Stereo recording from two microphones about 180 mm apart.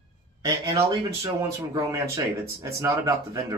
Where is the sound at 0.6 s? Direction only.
30° right (ahead or behind).